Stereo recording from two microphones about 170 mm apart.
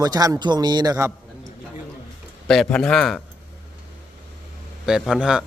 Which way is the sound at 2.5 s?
5° left (ahead or behind).